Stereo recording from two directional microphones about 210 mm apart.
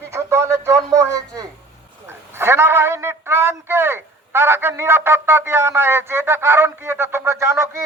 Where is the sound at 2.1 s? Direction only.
10° right (ahead or behind).